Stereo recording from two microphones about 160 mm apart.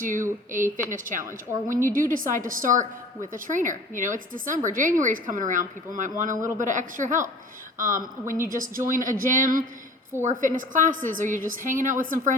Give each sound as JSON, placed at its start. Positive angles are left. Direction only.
{"t": 0.0, "sound": "a woman's voice", "side_deg": -55}
{"t": 1.2, "sound": "a woman's voice", "side_deg": -15}
{"t": 1.7, "sound": "a woman's voice", "side_deg": -55}
{"t": 6.3, "sound": "speech", "side_deg": -20}
{"t": 6.6, "sound": "a woman's voice", "side_deg": -55}